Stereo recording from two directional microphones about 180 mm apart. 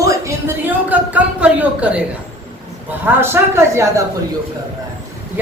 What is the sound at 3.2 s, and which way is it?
Speech, 15° right (ahead or behind).